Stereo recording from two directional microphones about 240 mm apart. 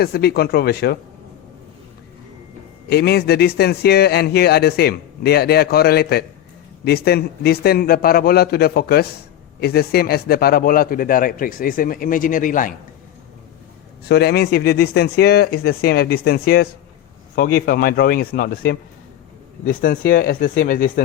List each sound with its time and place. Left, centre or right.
0.0 s speech: left
2.9 s speech: left
14.1 s speech: left